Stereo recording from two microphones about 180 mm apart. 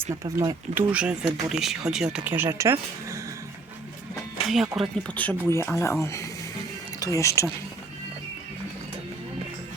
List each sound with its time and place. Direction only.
0.3 s speech: 15° right (ahead or behind)
4.1 s a sound: centre (ahead or behind)
4.8 s speech: 10° left (ahead or behind)